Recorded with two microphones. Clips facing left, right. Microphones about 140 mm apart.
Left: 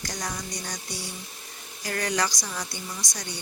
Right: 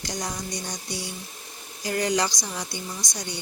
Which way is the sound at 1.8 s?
20° right (ahead or behind).